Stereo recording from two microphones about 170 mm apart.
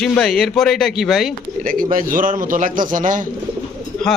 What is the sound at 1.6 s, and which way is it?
A man's voice, 55° right (ahead or behind).